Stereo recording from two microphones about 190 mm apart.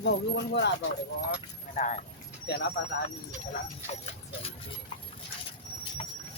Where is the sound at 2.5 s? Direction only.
60° left (ahead or behind).